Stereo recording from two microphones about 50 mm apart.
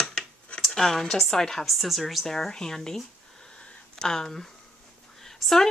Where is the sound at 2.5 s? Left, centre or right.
Centre.